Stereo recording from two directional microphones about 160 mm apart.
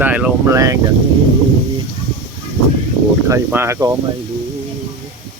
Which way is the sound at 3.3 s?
15° right (ahead or behind).